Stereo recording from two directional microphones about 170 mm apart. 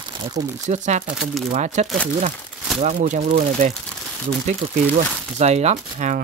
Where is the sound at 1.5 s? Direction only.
45° right (ahead or behind).